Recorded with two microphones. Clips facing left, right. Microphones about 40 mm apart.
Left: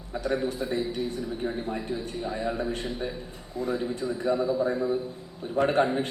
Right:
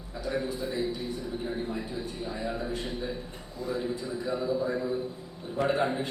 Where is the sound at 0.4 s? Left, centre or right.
Left.